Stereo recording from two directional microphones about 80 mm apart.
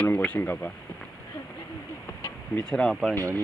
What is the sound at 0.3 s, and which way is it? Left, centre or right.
Speech, left.